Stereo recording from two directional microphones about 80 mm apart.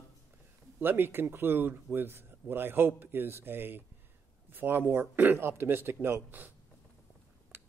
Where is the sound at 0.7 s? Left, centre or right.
Right.